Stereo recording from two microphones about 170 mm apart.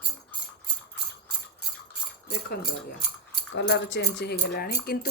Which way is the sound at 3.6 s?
90° left.